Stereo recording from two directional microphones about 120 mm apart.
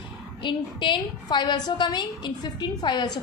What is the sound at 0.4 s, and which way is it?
A woman's voice, 40° left (ahead or behind).